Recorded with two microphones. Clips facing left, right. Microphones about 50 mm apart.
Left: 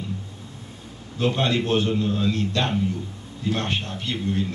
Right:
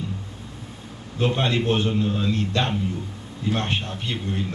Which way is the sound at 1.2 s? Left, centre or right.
Right.